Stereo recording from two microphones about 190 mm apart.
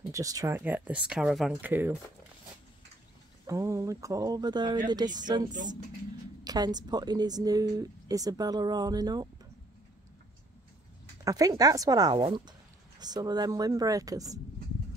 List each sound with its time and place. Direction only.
0.1 s speech: 20° right (ahead or behind)
3.4 s a woman's voice: 15° right (ahead or behind)
6.4 s a woman's voice: 20° right (ahead or behind)
11.2 s a woman's voice: 20° right (ahead or behind)